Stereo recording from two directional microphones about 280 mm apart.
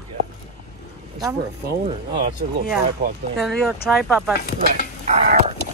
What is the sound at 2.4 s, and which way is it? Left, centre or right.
Speech, right.